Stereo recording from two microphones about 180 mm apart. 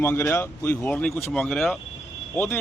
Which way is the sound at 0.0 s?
10° left (ahead or behind).